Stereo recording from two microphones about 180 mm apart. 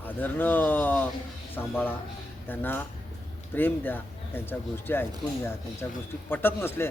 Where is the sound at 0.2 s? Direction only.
10° left (ahead or behind).